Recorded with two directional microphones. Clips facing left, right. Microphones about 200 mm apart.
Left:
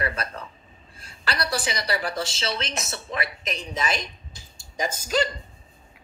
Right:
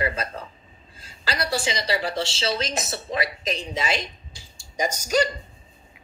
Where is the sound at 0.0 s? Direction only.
25° right (ahead or behind).